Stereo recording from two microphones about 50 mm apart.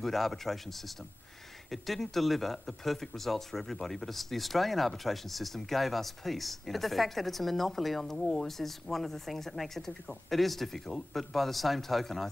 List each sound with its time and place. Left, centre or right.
0.0 s speech: centre